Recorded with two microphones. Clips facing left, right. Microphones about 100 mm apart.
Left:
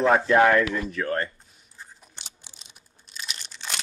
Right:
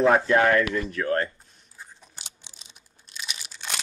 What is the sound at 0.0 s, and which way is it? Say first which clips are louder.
Speech: even; centre (ahead or behind).